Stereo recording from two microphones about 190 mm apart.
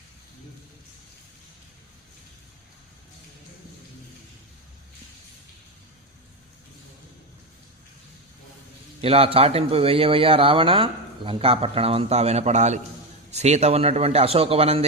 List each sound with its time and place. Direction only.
9.0 s speech: 30° right (ahead or behind)